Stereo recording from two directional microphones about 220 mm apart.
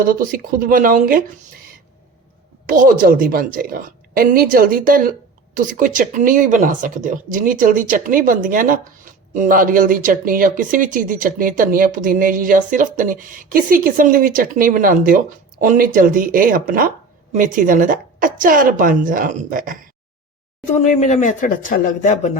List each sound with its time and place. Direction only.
0.0 s speech: 40° right (ahead or behind)
2.6 s speech: 40° right (ahead or behind)
20.7 s speech: 35° left (ahead or behind)